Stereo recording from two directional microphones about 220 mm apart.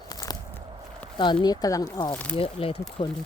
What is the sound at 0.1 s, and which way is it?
Walk, 15° left (ahead or behind).